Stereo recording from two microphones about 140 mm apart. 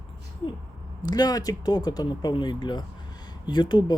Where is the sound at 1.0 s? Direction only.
30° left (ahead or behind).